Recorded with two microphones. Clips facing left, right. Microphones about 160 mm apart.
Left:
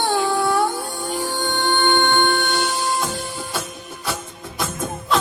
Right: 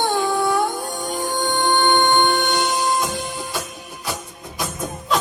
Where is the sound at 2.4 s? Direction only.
15° right (ahead or behind).